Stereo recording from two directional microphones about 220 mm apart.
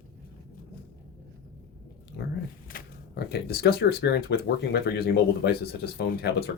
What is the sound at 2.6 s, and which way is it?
Speech, 45° left (ahead or behind).